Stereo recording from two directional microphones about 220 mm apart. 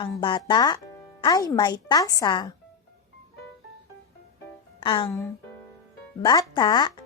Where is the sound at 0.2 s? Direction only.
20° left (ahead or behind).